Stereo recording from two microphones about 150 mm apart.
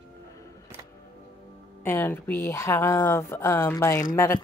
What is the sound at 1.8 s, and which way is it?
Speech, 15° left (ahead or behind).